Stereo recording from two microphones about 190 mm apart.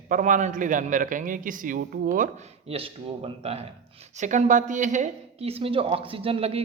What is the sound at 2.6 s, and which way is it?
A man's voice, 30° right (ahead or behind).